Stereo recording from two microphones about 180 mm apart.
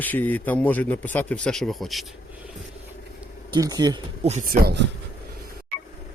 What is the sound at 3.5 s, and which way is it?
Speech, 20° right (ahead or behind).